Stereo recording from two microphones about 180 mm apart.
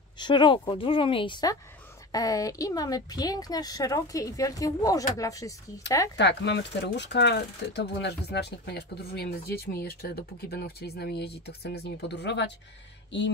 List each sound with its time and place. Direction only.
0.2 s speech: 25° left (ahead or behind)
6.1 s speech: 70° left (ahead or behind)